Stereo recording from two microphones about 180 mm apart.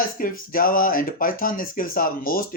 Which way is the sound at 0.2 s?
50° left (ahead or behind).